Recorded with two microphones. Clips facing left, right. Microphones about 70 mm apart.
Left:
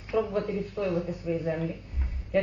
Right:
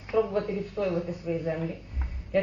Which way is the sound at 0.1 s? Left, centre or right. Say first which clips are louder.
Right 1 dB; centre.